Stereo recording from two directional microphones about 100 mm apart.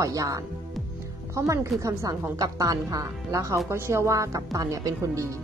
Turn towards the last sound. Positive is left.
turn(degrees=-35)  # may be behind; listen again after turning